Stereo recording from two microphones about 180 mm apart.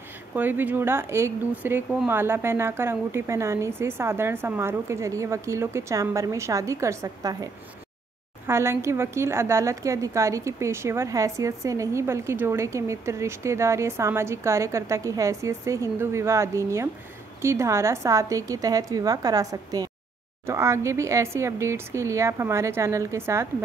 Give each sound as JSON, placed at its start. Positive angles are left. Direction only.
{"t": 0.3, "sound": "a woman's voice", "side_deg": -10}
{"t": 8.5, "sound": "a woman's voice", "side_deg": -15}